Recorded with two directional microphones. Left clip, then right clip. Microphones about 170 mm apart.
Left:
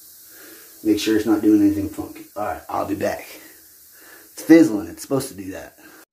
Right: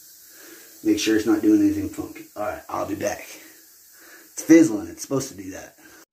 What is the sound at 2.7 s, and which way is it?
Speech, 25° left (ahead or behind).